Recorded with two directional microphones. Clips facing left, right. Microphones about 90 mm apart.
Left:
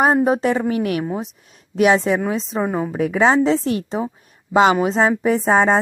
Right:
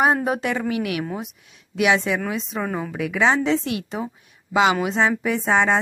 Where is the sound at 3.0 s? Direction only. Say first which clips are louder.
Left 4 dB; 35° left (ahead or behind).